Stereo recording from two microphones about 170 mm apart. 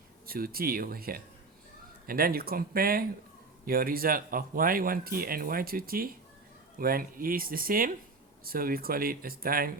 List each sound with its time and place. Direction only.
0.3 s speech: 60° right (ahead or behind)